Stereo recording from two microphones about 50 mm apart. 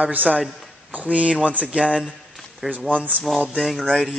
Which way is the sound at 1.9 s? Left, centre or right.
Centre.